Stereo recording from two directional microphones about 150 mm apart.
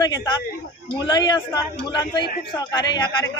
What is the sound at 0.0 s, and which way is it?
A man's voice, 30° left (ahead or behind).